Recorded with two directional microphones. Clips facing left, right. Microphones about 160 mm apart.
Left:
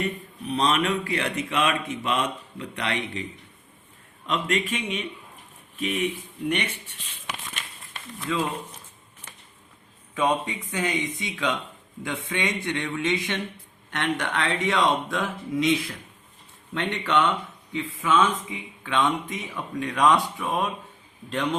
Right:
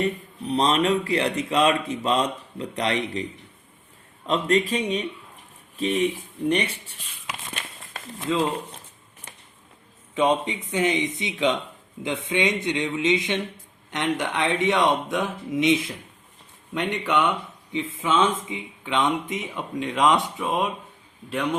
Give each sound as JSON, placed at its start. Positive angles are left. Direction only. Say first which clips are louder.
{"t": 0.0, "sound": "a man's voice", "louder": "right 4 dB", "side_deg": -35}
{"t": 4.3, "sound": "a man's voice", "louder": "right 5 dB", "side_deg": -35}
{"t": 8.2, "sound": "speech", "louder": "right 4 dB", "side_deg": -25}
{"t": 10.2, "sound": "speech", "louder": "right 3 dB", "side_deg": -20}
{"t": 21.2, "sound": "a man's voice", "louder": "right 1 dB", "side_deg": -10}